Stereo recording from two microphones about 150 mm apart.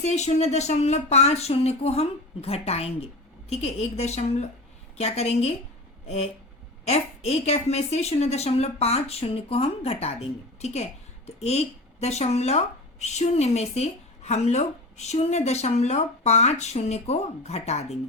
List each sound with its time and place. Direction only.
0.0 s speech: 45° left (ahead or behind)
6.8 s speech: 45° left (ahead or behind)